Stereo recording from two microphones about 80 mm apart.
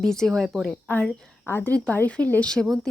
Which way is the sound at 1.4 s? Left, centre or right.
Left.